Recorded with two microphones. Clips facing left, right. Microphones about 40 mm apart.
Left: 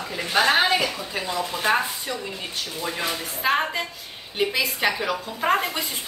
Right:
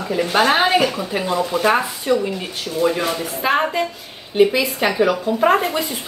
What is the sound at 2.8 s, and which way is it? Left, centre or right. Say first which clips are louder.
Speech: right 14 dB; right.